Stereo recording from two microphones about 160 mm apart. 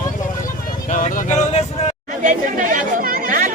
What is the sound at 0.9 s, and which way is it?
Speech, 50° left (ahead or behind).